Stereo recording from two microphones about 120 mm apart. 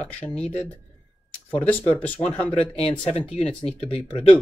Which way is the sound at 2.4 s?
10° left (ahead or behind).